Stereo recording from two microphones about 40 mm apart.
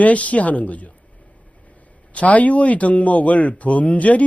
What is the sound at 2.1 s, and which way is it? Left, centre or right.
Speech, left.